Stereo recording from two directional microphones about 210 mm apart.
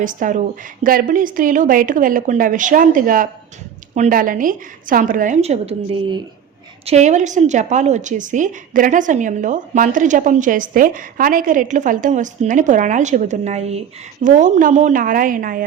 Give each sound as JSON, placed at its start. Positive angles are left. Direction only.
{"t": 0.0, "sound": "a woman's voice", "side_deg": -40}